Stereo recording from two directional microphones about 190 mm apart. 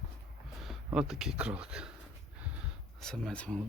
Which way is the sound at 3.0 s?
5° left (ahead or behind).